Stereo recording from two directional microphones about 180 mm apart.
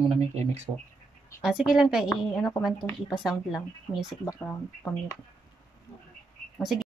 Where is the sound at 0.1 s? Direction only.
35° right (ahead or behind).